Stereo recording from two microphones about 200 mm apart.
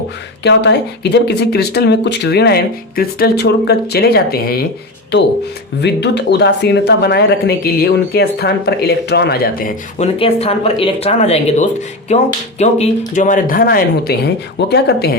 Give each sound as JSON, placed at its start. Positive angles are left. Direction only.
{"t": 0.4, "sound": "speech", "side_deg": 60}
{"t": 5.8, "sound": "speech", "side_deg": 60}
{"t": 10.2, "sound": "speech", "side_deg": 30}